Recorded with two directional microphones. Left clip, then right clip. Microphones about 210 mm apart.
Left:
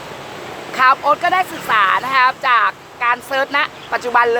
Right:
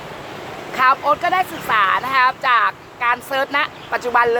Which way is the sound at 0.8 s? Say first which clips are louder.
Left 2 dB; 10° left (ahead or behind).